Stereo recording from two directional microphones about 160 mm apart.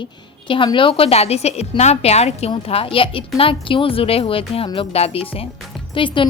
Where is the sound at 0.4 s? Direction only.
30° left (ahead or behind).